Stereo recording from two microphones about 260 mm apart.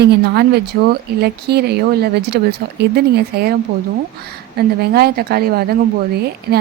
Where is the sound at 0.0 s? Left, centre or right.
Right.